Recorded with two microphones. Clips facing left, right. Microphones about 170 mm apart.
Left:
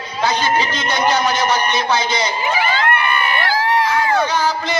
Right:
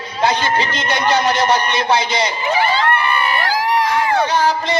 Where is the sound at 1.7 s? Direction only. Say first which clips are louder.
Right 1 dB; 65° right (ahead or behind).